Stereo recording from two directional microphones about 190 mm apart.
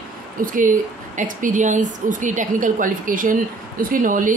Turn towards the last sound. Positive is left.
turn(degrees=-45)  # may be behind; listen again after turning